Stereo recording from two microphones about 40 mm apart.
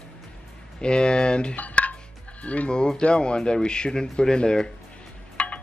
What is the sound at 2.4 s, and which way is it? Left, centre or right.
Speech, left.